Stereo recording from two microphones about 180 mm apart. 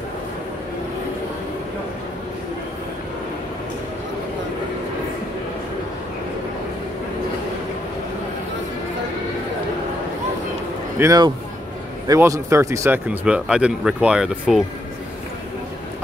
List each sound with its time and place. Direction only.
11.0 s speech: 20° right (ahead or behind); by 14.6 s 5° right (ahead or behind)